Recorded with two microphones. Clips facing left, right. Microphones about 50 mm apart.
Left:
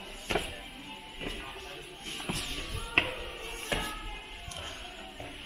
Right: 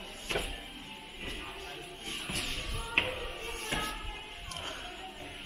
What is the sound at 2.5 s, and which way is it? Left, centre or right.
Basketball bounce, centre.